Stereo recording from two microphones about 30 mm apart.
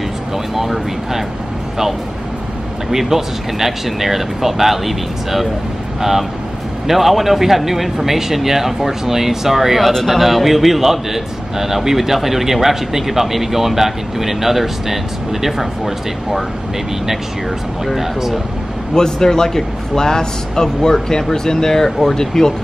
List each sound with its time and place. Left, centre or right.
0.6 s speech: centre
2.9 s speech: centre
17.9 s speech: centre
18.9 s speech: centre